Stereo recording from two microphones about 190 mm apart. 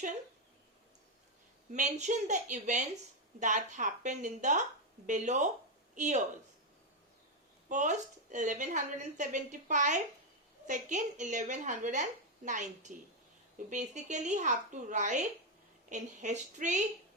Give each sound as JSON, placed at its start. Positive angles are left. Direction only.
{"t": 1.7, "sound": "a woman's voice", "side_deg": -40}
{"t": 7.7, "sound": "a woman's voice", "side_deg": -40}